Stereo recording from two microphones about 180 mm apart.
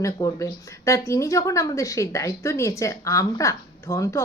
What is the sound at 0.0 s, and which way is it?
A woman's voice, 20° left (ahead or behind).